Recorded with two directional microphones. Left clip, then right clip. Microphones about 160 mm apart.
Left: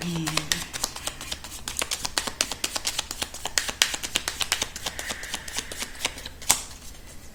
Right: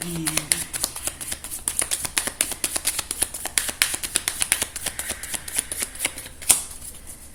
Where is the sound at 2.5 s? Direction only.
15° left (ahead or behind).